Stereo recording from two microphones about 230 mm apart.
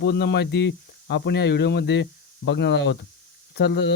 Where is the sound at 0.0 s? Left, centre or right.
Left.